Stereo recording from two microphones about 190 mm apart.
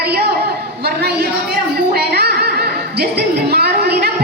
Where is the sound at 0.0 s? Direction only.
55° right (ahead or behind).